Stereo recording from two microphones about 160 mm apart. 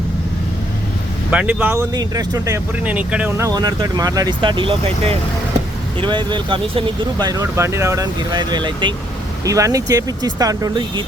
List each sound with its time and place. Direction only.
1.3 s speech: 10° right (ahead or behind)
2.0 s speech: 25° right (ahead or behind)
2.8 s speech: 10° right (ahead or behind); by 11.0 s 25° right (ahead or behind)